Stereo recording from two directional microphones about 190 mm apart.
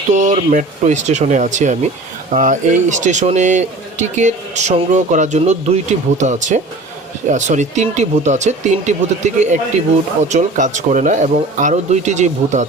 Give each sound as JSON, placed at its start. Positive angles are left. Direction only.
{"t": 0.1, "sound": "speech", "side_deg": -40}